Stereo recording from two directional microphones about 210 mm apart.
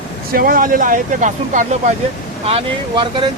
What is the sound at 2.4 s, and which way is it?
Speech, 25° right (ahead or behind).